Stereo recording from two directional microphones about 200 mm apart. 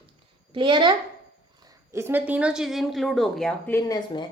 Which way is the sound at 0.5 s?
25° right (ahead or behind).